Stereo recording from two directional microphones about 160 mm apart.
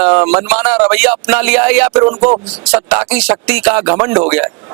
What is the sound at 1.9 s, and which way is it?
Speech, 20° right (ahead or behind).